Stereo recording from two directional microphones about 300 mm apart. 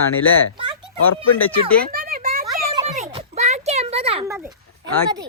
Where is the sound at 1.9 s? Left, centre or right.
Right; by 4.5 s centre.